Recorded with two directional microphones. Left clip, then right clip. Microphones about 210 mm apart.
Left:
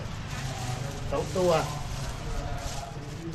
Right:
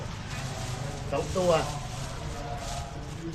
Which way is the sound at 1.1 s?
10° left (ahead or behind).